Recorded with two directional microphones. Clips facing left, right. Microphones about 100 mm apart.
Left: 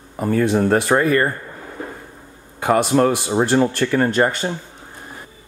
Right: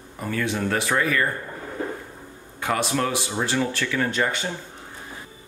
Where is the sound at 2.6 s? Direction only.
50° left (ahead or behind).